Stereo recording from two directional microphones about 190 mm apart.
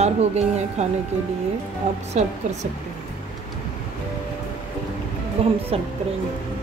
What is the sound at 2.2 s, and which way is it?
Speech, 35° right (ahead or behind).